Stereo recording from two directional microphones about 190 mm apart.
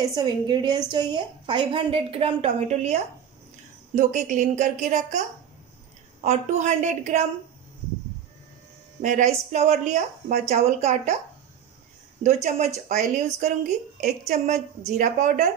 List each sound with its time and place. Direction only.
0.0 s a woman's voice: 20° right (ahead or behind); by 5.2 s 40° right (ahead or behind)
6.2 s speech: 35° right (ahead or behind)
9.0 s speech: 40° right (ahead or behind)
12.2 s speech: 35° right (ahead or behind)